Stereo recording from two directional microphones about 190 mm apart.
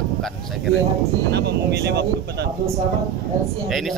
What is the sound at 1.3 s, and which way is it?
Speech, 60° right (ahead or behind).